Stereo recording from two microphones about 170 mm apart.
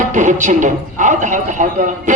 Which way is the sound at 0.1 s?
45° right (ahead or behind).